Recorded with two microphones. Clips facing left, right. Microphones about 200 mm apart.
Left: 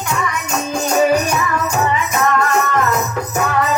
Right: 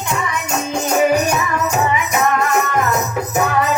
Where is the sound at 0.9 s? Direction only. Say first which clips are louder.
Even; 15° right (ahead or behind).